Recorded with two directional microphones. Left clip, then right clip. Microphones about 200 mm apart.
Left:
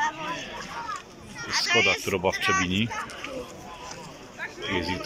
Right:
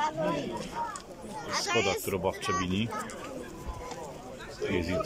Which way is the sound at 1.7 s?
50° right (ahead or behind).